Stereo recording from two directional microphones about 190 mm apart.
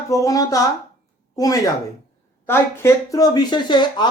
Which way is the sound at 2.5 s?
15° left (ahead or behind).